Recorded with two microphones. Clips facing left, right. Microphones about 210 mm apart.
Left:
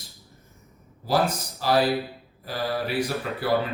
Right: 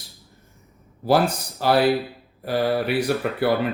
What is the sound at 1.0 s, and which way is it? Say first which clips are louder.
Speech: right 4 dB; 65° right (ahead or behind).